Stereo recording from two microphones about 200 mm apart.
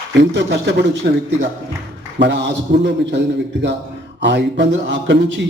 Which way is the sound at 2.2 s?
60° right (ahead or behind).